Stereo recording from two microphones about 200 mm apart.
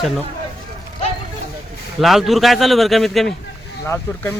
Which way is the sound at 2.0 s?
Centre (ahead or behind).